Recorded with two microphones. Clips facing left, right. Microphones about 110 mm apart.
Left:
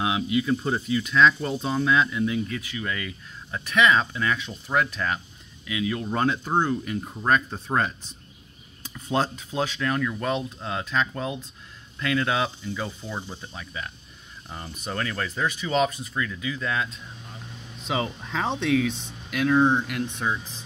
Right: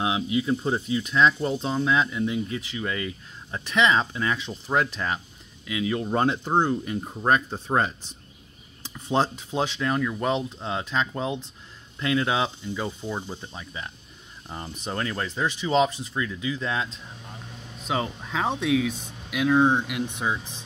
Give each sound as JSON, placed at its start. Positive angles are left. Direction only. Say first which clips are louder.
{"t": 0.0, "sound": "speech", "louder": "even", "side_deg": -25}
{"t": 17.8, "sound": "speech", "louder": "even", "side_deg": 0}